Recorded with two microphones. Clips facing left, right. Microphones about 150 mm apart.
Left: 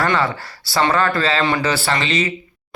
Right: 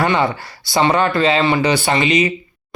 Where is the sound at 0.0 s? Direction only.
20° right (ahead or behind).